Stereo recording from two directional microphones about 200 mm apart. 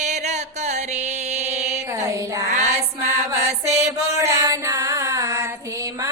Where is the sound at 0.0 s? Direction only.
35° right (ahead or behind).